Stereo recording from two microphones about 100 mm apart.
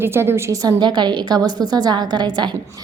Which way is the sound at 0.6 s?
45° right (ahead or behind).